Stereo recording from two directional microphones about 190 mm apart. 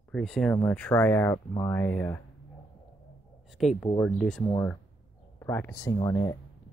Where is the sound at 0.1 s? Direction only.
5° left (ahead or behind).